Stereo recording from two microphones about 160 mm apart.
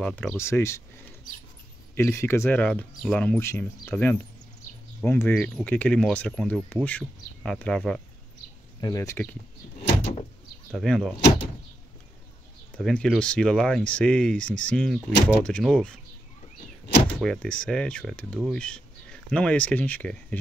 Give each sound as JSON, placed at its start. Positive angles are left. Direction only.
{"t": 0.0, "sound": "speech", "side_deg": 5}
{"t": 0.4, "sound": "speech", "side_deg": 15}
{"t": 2.0, "sound": "speech", "side_deg": 15}
{"t": 8.8, "sound": "speech", "side_deg": 20}
{"t": 10.7, "sound": "speech", "side_deg": 0}
{"t": 12.7, "sound": "speech", "side_deg": 5}
{"t": 17.1, "sound": "speech", "side_deg": 5}